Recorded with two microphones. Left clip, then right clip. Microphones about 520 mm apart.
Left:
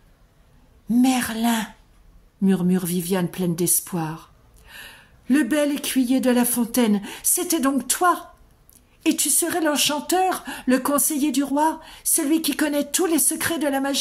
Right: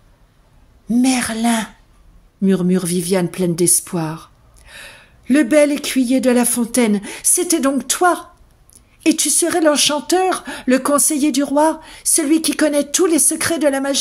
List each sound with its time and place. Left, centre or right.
0.8 s a woman's voice: left